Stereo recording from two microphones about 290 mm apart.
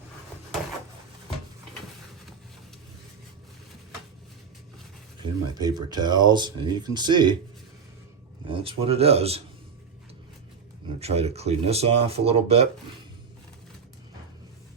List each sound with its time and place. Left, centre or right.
5.2 s speech: centre
8.4 s speech: centre
11.0 s speech: right